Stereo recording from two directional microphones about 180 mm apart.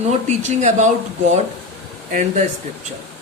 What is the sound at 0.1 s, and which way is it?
Speech, 40° right (ahead or behind).